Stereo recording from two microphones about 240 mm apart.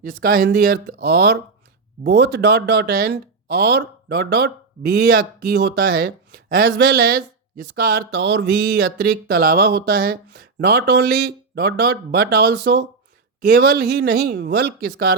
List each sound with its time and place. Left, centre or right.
0.0 s speech: right